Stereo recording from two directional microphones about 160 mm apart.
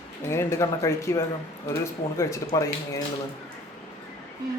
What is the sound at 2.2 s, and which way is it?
Speech, 20° left (ahead or behind).